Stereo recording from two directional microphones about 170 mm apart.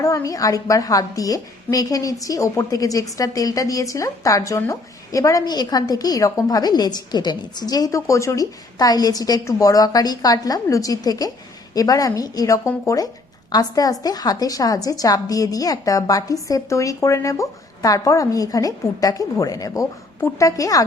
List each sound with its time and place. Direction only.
0.0 s a woman's voice: 20° left (ahead or behind)